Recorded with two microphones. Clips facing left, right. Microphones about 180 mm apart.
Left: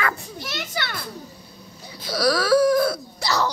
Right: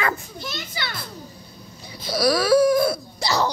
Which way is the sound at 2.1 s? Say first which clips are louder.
Right 1 dB; 15° right (ahead or behind).